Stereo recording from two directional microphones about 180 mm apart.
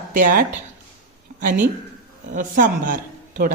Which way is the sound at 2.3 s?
50° right (ahead or behind).